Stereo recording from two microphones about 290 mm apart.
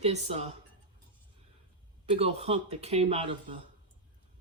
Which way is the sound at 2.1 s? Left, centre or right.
Centre.